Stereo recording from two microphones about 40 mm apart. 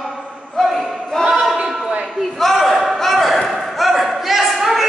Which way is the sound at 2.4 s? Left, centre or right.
Centre.